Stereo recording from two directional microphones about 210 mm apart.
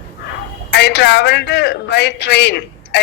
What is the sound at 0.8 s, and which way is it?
A man's voice, 55° left (ahead or behind).